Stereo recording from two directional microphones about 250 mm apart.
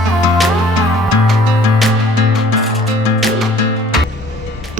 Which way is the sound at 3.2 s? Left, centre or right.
Centre.